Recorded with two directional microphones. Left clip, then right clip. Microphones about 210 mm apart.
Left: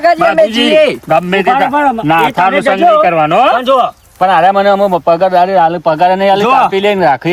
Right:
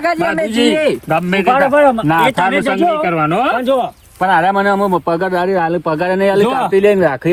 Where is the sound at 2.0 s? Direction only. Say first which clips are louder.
Left 3 dB; 15° left (ahead or behind).